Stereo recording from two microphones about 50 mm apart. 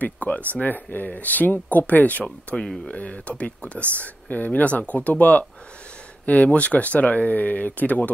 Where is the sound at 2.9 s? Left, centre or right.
Left.